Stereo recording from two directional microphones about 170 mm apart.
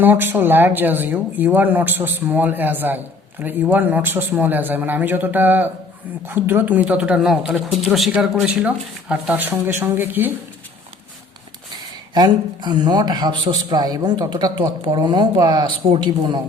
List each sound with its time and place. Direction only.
0.0 s speech: 10° right (ahead or behind)
12.1 s a man's voice: 25° right (ahead or behind)